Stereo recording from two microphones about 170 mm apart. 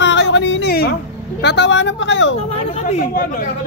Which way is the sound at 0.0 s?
90° left.